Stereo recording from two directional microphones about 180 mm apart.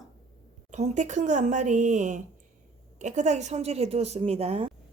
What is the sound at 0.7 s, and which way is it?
A woman's voice, 40° right (ahead or behind).